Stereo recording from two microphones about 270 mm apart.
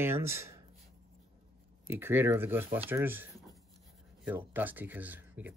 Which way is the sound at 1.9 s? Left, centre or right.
Centre.